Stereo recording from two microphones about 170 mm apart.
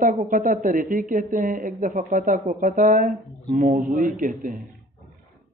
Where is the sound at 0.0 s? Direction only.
50° right (ahead or behind).